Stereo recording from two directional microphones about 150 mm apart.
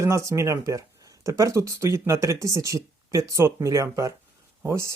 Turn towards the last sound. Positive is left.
turn(degrees=-20)  # may be behind; listen again after turning